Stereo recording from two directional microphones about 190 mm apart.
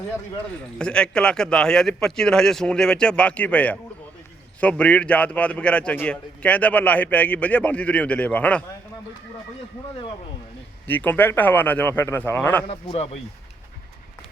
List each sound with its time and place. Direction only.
0.5 s a man's voice: 5° left (ahead or behind)
10.8 s a man's voice: 10° left (ahead or behind)
12.6 s speech: 30° left (ahead or behind)